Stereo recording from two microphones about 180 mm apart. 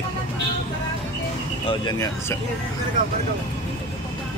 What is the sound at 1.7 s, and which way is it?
Speech, 20° left (ahead or behind).